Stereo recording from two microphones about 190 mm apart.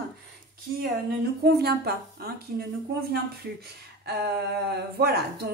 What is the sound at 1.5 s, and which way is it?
Speech, 55° right (ahead or behind).